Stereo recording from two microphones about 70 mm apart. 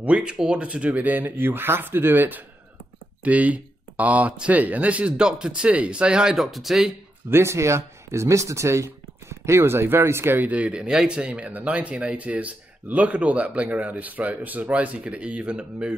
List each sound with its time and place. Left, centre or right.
0.0 s speech: centre
6.3 s speech: centre
7.2 s speech: right; by 15.9 s centre